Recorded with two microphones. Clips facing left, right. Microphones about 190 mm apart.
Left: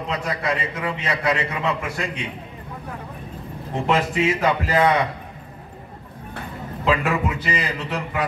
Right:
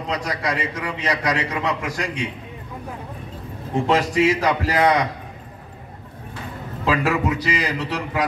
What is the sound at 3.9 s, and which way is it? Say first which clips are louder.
A man's voice: right 2 dB; 35° right (ahead or behind).